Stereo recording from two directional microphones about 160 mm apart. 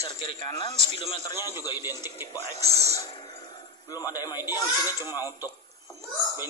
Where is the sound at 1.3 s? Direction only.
15° right (ahead or behind).